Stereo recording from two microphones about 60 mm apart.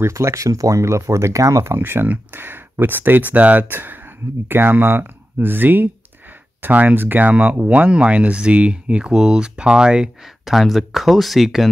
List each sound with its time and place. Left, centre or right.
0.0 s speech: right
1.8 s speech: right; by 10.5 s centre
10.5 s speech: centre